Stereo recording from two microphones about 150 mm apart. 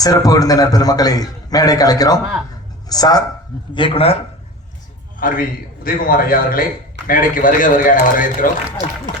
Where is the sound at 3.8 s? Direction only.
35° left (ahead or behind).